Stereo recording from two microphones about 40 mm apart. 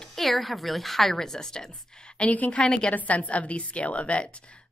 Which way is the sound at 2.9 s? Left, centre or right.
Left.